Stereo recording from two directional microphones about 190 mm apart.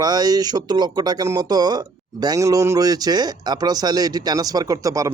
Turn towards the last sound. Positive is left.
turn(degrees=-15)  # may be behind; listen again after turning